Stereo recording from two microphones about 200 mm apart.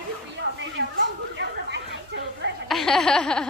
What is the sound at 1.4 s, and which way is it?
Chatter, 60° right (ahead or behind).